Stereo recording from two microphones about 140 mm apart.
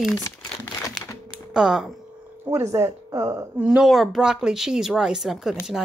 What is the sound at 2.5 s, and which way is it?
Speech, 20° right (ahead or behind).